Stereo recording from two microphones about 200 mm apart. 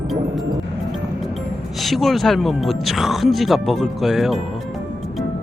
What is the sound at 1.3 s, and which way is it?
Speech, centre (ahead or behind).